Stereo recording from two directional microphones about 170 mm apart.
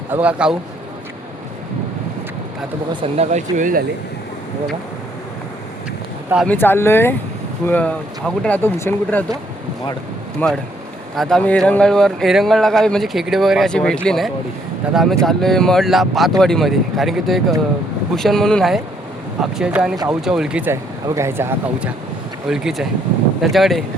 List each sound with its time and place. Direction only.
0.1 s speech: 10° right (ahead or behind)
3.0 s speech: 40° right (ahead or behind)
6.5 s speech: 10° left (ahead or behind)
10.4 s speech: 10° left (ahead or behind)